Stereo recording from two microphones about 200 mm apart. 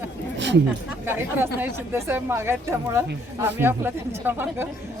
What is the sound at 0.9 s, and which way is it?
A woman's voice, 10° right (ahead or behind).